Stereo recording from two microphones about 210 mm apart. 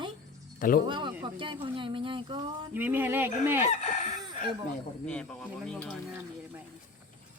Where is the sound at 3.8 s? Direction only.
35° left (ahead or behind).